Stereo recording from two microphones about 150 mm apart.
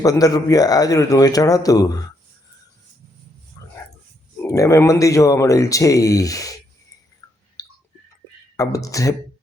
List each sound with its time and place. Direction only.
0.0 s speech: 25° left (ahead or behind)
3.6 s dog: 20° left (ahead or behind)
4.4 s speech: 20° left (ahead or behind)
7.6 s a sound: 25° left (ahead or behind)
8.5 s speech: 20° left (ahead or behind)